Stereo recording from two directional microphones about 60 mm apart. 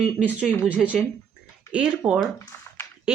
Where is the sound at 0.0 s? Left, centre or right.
Centre.